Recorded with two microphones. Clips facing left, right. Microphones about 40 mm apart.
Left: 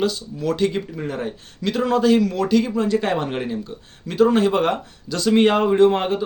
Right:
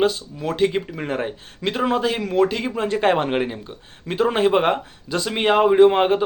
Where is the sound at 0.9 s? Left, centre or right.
Right.